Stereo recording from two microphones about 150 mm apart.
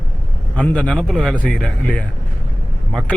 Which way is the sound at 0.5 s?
10° left (ahead or behind).